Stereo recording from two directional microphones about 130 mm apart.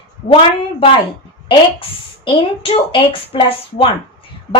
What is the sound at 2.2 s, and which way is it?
A woman's voice, 45° left (ahead or behind).